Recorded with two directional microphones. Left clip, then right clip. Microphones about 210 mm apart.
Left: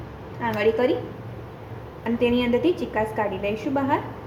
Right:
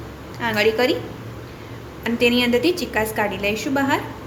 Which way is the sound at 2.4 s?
15° right (ahead or behind).